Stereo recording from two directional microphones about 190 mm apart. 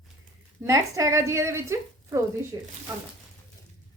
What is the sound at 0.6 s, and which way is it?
A woman's voice, 15° right (ahead or behind).